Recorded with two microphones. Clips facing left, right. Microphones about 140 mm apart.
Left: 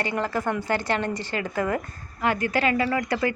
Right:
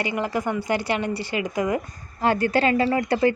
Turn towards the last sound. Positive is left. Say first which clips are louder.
# right 4 dB
turn(degrees=-30)  # may be behind; listen again after turning